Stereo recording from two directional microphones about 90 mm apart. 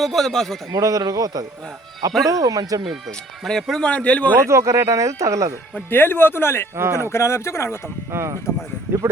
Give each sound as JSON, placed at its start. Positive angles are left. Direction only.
{"t": 0.0, "sound": "a man's voice", "side_deg": 5}
{"t": 0.7, "sound": "speech", "side_deg": -40}
{"t": 3.1, "sound": "speech", "side_deg": 5}
{"t": 4.4, "sound": "speech", "side_deg": -35}
{"t": 5.7, "sound": "speech", "side_deg": 25}
{"t": 6.7, "sound": "speech", "side_deg": -30}
{"t": 7.0, "sound": "speech", "side_deg": 30}
{"t": 8.1, "sound": "speech", "side_deg": -30}